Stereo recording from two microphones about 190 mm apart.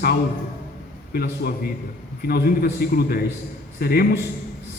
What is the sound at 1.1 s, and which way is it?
A man's voice, 55° left (ahead or behind).